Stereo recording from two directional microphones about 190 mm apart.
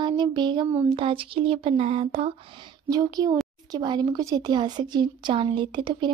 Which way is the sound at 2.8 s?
20° right (ahead or behind).